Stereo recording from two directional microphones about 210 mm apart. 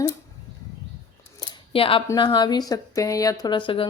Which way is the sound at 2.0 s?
20° left (ahead or behind).